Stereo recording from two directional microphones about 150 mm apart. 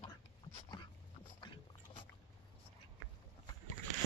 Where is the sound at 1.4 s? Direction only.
35° left (ahead or behind).